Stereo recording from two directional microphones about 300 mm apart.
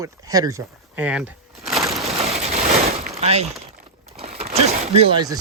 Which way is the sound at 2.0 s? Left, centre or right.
Centre.